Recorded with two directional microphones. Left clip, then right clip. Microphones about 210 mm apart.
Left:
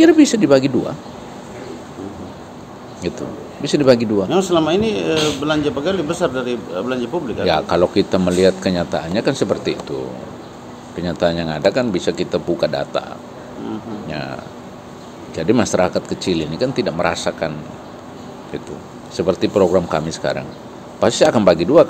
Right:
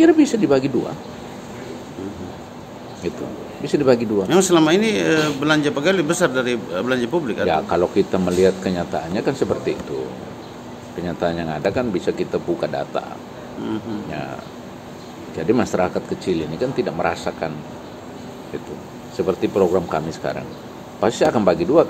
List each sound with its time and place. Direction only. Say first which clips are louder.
0.0 s speech: left 3 dB; 35° left (ahead or behind)
3.6 s speech: left 3 dB; 35° left (ahead or behind)
4.3 s speech: right 2 dB; 45° right (ahead or behind)
7.4 s speech: left 5 dB; 40° left (ahead or behind)
11.0 s speech: left 4 dB; 40° left (ahead or behind)
15.3 s speech: left 3 dB; 35° left (ahead or behind)
19.1 s speech: left 3 dB; 40° left (ahead or behind)